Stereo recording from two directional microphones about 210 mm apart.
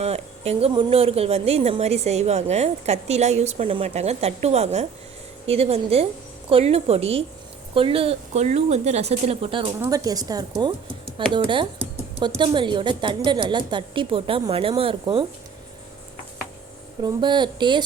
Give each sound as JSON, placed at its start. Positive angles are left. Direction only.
{"t": 0.0, "sound": "a woman's voice", "side_deg": -30}
{"t": 17.0, "sound": "a woman's voice", "side_deg": -20}